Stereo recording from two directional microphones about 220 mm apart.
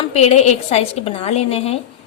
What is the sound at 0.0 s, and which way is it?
A woman's voice, 30° left (ahead or behind).